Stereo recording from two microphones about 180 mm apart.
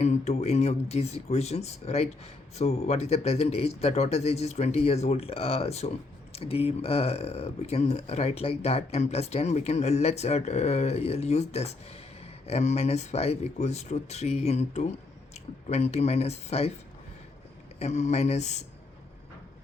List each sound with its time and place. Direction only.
0.0 s speech: 40° left (ahead or behind)
17.7 s speech: 40° left (ahead or behind)